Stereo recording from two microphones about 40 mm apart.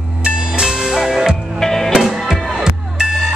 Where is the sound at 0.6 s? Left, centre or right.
Centre.